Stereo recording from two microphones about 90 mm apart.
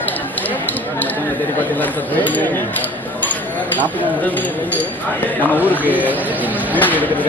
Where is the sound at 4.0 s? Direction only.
20° left (ahead or behind).